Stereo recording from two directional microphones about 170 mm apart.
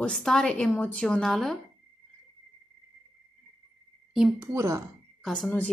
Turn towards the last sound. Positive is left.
turn(degrees=10)  # may be behind; listen again after turning